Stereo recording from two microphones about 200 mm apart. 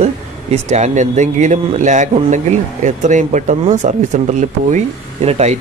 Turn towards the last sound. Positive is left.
turn(degrees=-30)  # may be behind; listen again after turning